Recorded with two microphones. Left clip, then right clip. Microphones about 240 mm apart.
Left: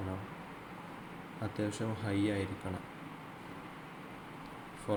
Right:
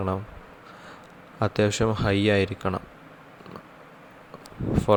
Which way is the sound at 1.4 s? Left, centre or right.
Right.